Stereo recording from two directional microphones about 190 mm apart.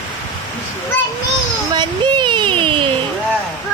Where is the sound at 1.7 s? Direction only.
25° right (ahead or behind).